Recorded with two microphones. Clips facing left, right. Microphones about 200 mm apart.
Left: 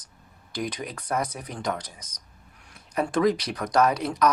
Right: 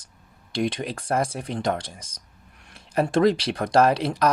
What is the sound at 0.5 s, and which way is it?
Speech, 25° right (ahead or behind).